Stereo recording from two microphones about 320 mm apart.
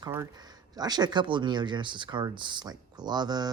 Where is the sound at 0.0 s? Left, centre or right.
Centre.